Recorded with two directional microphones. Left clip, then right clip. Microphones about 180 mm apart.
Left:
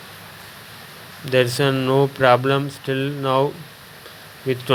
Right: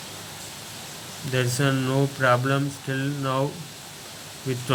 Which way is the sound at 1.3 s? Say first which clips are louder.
Left 7 dB; 20° left (ahead or behind).